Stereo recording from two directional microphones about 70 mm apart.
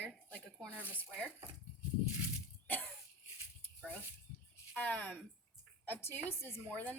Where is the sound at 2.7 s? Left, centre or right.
Left.